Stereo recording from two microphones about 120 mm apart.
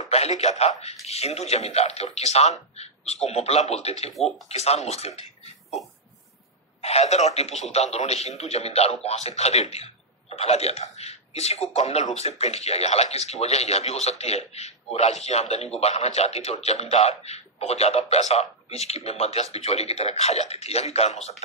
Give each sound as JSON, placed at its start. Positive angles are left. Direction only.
{"t": 0.1, "sound": "speech", "side_deg": 65}
{"t": 6.8, "sound": "speech", "side_deg": 60}